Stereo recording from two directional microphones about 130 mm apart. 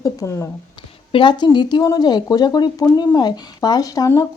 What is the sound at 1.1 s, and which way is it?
Speech, 40° left (ahead or behind).